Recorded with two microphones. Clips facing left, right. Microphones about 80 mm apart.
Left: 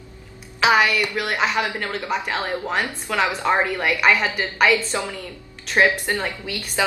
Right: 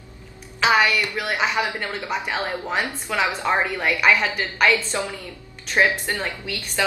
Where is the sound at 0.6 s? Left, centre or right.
Centre.